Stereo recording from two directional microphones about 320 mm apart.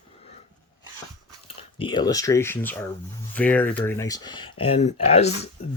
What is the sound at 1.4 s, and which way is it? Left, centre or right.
Speech, centre.